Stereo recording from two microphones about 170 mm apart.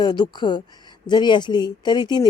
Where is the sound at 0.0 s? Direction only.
25° left (ahead or behind).